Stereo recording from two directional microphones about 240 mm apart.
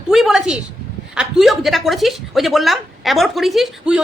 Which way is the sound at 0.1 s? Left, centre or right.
Centre.